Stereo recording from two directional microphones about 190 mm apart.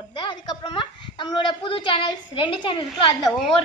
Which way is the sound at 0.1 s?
25° left (ahead or behind).